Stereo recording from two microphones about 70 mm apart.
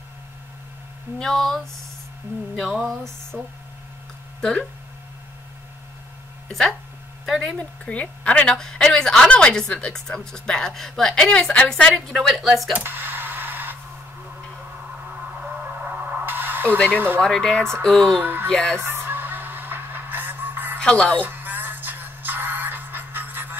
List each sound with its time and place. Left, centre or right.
1.2 s a woman's voice: centre
3.3 s speech: centre
4.4 s speech: centre
7.4 s a woman's voice: centre
12.1 s a woman's voice: centre
12.7 s a sound: right
15.1 s a sound: centre
16.7 s a woman's voice: centre
18.2 s speech: right
18.5 s speech: centre
18.8 s music: right
20.8 s speech: centre
21.2 s music: right